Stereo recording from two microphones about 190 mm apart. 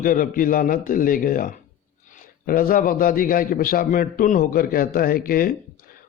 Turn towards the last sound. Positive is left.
turn(degrees=50)  # may be behind; listen again after turning